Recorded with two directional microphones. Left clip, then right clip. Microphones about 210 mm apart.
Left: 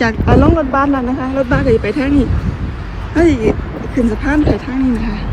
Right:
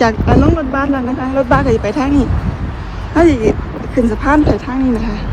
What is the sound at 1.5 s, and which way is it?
Speech, 15° right (ahead or behind).